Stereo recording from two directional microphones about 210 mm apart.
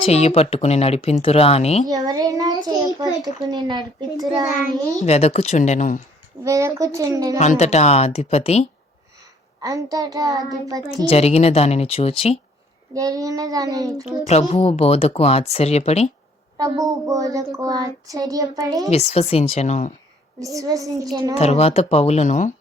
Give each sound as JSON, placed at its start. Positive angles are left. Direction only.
{"t": 0.1, "sound": "speech", "side_deg": 30}
{"t": 1.9, "sound": "a woman's voice", "side_deg": -15}
{"t": 4.9, "sound": "speech", "side_deg": 30}
{"t": 6.4, "sound": "a woman's voice", "side_deg": -15}
{"t": 7.3, "sound": "speech", "side_deg": 35}
{"t": 9.6, "sound": "a woman's voice", "side_deg": -15}
{"t": 11.0, "sound": "speech", "side_deg": 30}
{"t": 12.9, "sound": "a woman's voice", "side_deg": -15}
{"t": 14.0, "sound": "speech", "side_deg": 30}
{"t": 16.6, "sound": "a woman's voice", "side_deg": -15}
{"t": 18.9, "sound": "speech", "side_deg": 30}
{"t": 20.4, "sound": "a woman's voice", "side_deg": -15}
{"t": 21.3, "sound": "speech", "side_deg": 30}